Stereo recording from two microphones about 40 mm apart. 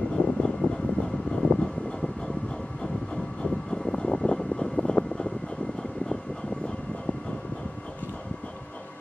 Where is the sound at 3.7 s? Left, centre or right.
Centre.